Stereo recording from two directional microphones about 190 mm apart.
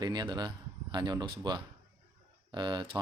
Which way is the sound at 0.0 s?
20° right (ahead or behind).